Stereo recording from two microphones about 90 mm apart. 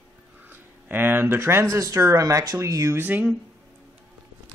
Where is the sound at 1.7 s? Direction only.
35° right (ahead or behind).